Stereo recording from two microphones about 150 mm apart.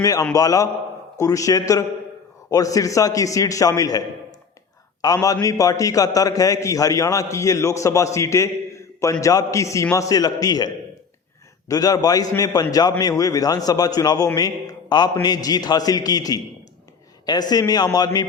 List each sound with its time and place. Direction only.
0.0 s a man's voice: 25° left (ahead or behind)
5.0 s a man's voice: 25° left (ahead or behind)
11.7 s a man's voice: 25° left (ahead or behind)
17.5 s a man's voice: 25° left (ahead or behind)